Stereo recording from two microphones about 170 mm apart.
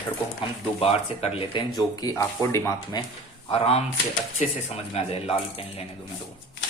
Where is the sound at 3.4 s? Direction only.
35° left (ahead or behind).